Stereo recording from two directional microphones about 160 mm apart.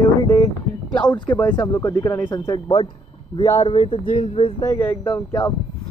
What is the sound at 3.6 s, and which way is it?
Speech, 30° left (ahead or behind).